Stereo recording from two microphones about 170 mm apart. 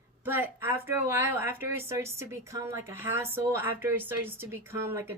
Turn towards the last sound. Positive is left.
turn(degrees=-15)  # may be behind; listen again after turning